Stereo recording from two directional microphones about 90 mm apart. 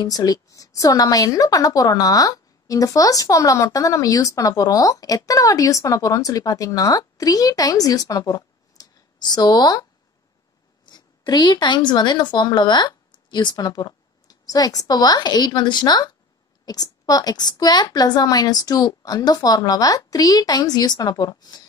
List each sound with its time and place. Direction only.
0.0 s a woman's voice: 45° left (ahead or behind)
10.9 s a woman's voice: 50° left (ahead or behind)